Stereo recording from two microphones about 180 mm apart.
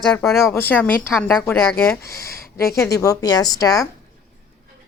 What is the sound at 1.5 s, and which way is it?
Speech, 15° left (ahead or behind).